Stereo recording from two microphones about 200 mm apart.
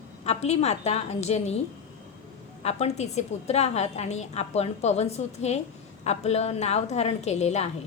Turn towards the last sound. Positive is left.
turn(degrees=35)  # may be behind; listen again after turning